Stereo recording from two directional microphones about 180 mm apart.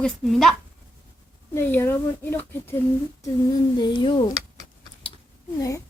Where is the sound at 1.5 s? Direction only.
10° left (ahead or behind).